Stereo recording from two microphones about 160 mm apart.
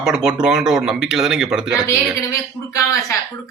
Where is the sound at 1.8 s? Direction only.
20° left (ahead or behind).